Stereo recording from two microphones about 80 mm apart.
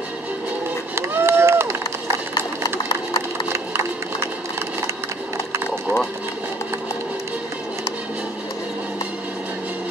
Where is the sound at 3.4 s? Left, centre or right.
Right.